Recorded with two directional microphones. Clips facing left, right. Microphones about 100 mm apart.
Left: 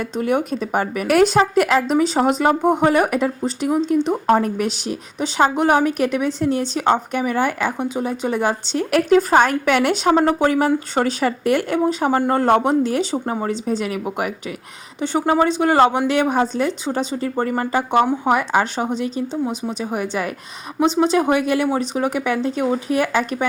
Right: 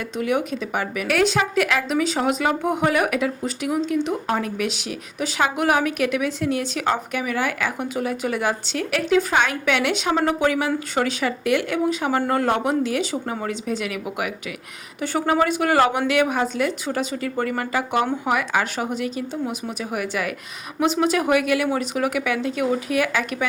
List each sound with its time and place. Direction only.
0.0 s speech: 35° left (ahead or behind)
8.9 s speech: 50° left (ahead or behind)
15.0 s a woman's voice: 25° left (ahead or behind)